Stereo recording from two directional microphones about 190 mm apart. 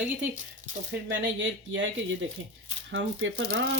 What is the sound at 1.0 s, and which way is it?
Speech, 75° right (ahead or behind).